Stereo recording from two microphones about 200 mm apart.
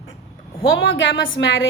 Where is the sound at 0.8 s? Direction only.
70° left (ahead or behind).